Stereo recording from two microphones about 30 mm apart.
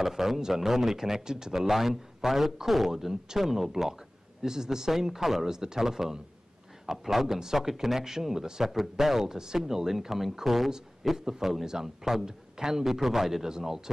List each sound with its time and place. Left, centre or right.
0.0 s a man's voice: centre
1.7 s a man's voice: centre
5.5 s a man's voice: centre
9.2 s speech: right
9.6 s a man's voice: centre